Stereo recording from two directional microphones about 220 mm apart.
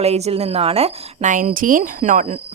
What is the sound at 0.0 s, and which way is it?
A woman's voice, 30° right (ahead or behind).